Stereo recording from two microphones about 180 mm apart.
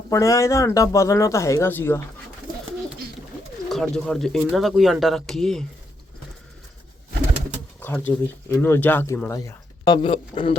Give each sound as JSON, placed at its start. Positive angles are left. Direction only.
{"t": 0.1, "sound": "speech", "side_deg": 15}
{"t": 3.7, "sound": "speech", "side_deg": 0}
{"t": 7.8, "sound": "speech", "side_deg": 10}